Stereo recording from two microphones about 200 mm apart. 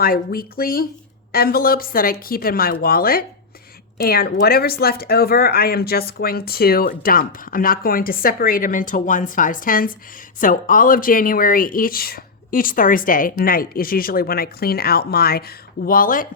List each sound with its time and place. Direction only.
0.0 s a woman's voice: 50° left (ahead or behind)